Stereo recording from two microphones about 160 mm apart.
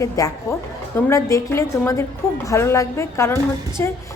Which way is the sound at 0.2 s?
20° left (ahead or behind).